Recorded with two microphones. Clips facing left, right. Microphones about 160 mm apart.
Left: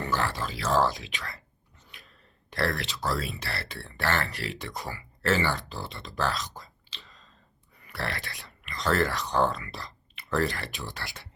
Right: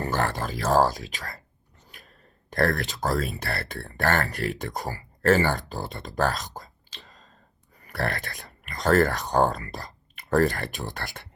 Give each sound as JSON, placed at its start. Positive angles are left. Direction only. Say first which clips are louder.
{"t": 0.0, "sound": "speech", "louder": "right 3 dB", "side_deg": -50}
{"t": 1.9, "sound": "a sound", "louder": "right 3 dB", "side_deg": -45}
{"t": 3.4, "sound": "speech", "louder": "right 5 dB", "side_deg": -50}